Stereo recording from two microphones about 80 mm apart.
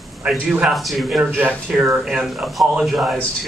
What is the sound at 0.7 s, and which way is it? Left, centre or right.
Speech, centre.